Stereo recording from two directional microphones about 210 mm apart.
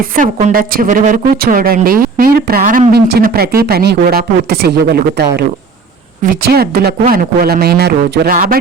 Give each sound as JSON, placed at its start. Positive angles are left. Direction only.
{"t": 0.2, "sound": "a woman's voice", "side_deg": -35}